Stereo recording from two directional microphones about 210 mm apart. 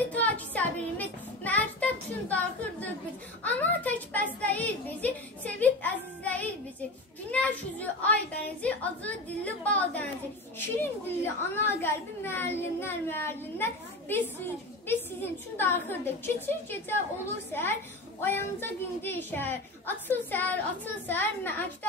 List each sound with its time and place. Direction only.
0.0 s child singing: 5° left (ahead or behind)
3.4 s a sound: 10° left (ahead or behind)
4.4 s a child's voice: 5° left (ahead or behind)